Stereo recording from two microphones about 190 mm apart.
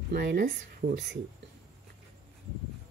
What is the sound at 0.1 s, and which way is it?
Speech, 60° right (ahead or behind).